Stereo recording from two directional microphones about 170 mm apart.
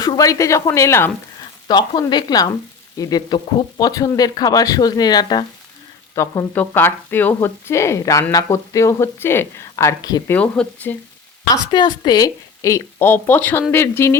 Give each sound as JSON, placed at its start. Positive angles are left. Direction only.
{"t": 0.0, "sound": "a woman's voice", "side_deg": 20}
{"t": 1.6, "sound": "a woman's voice", "side_deg": 25}
{"t": 10.3, "sound": "a woman's voice", "side_deg": 10}
{"t": 11.5, "sound": "a woman's voice", "side_deg": 25}